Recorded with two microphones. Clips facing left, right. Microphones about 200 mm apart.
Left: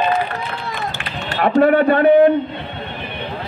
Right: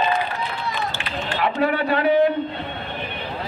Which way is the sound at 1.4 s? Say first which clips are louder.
Left 9 dB; 50° left (ahead or behind).